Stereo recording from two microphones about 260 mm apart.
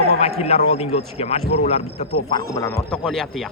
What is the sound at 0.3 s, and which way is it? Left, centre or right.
Speech, left.